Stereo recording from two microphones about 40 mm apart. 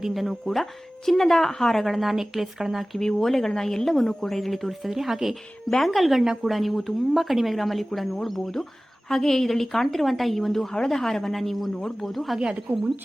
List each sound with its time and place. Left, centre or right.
0.1 s speech: centre
3.0 s a woman's voice: centre
12.4 s speech: right